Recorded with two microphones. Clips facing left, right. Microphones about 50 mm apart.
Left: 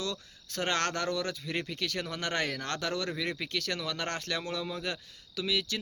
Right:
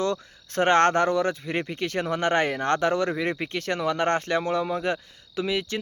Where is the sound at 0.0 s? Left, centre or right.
Right.